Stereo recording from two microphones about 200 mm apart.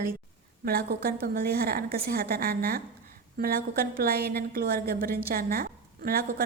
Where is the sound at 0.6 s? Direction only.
50° right (ahead or behind).